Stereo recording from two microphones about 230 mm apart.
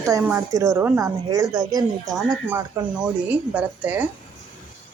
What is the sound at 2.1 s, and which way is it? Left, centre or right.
A woman's voice, centre.